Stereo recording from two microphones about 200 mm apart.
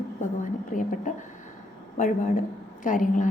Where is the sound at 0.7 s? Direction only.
40° left (ahead or behind).